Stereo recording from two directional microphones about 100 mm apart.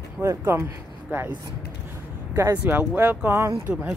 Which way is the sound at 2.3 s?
30° right (ahead or behind).